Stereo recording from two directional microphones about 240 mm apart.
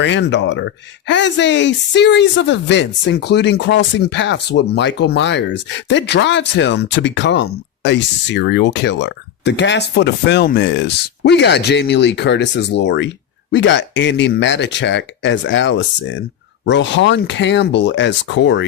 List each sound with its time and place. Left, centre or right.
0.0 s speech: left